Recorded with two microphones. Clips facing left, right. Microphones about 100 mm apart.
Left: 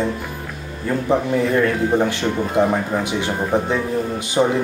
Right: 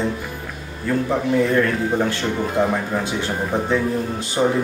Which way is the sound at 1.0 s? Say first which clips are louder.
Left 2 dB; 20° left (ahead or behind).